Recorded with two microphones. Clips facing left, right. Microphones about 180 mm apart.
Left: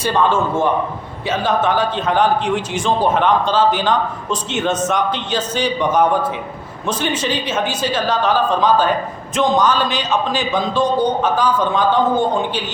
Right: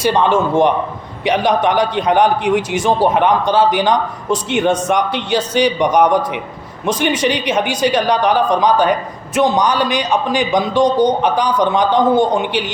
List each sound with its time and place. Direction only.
0.0 s a man's voice: 15° right (ahead or behind)